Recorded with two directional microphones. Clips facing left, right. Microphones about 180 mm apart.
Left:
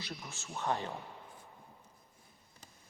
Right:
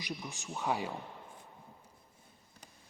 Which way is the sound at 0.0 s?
15° right (ahead or behind).